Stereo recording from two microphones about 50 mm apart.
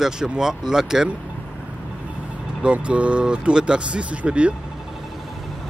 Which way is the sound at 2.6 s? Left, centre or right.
Right.